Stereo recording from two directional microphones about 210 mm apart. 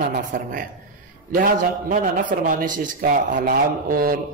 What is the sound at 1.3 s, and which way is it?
A man's voice, 40° right (ahead or behind).